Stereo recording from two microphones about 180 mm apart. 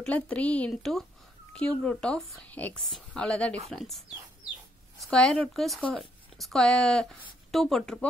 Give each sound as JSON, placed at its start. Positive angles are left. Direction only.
{"t": 0.0, "sound": "a woman's voice", "side_deg": 10}
{"t": 5.0, "sound": "speech", "side_deg": 5}